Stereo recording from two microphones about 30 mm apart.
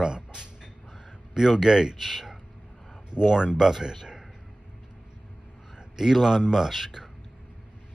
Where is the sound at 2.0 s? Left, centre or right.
Centre.